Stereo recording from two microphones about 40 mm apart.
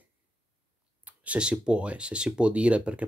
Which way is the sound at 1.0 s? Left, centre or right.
Right.